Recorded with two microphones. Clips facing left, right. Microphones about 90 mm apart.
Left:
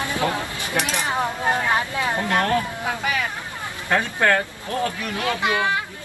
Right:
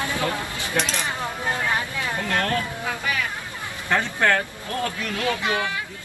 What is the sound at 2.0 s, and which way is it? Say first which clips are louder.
Speech: left 4 dB; 20° left (ahead or behind).